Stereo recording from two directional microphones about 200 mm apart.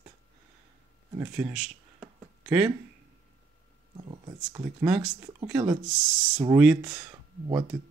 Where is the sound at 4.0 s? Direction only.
20° right (ahead or behind).